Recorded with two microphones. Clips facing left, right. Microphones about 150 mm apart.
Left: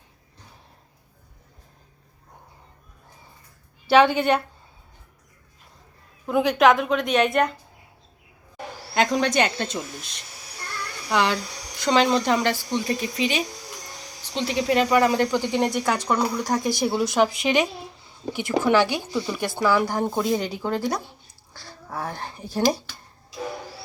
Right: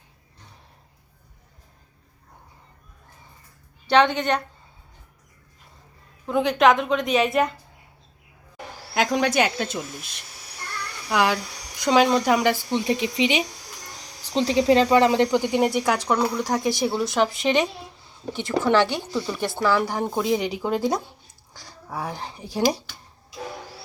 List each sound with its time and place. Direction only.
3.8 s a woman's voice: 5° left (ahead or behind)
6.2 s a woman's voice: 5° left (ahead or behind)
9.0 s a woman's voice: 5° right (ahead or behind)
20.6 s speech: 15° right (ahead or behind)